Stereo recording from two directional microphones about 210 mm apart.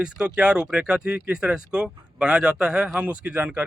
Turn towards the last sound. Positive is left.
turn(degrees=-5)  # may be behind; listen again after turning